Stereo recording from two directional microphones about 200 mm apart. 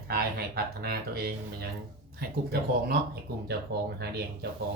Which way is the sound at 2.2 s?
50° right (ahead or behind).